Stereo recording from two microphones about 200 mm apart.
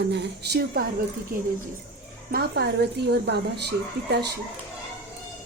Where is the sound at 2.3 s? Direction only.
50° right (ahead or behind).